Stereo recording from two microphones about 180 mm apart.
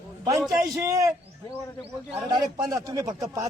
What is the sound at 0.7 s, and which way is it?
Speech, 15° right (ahead or behind).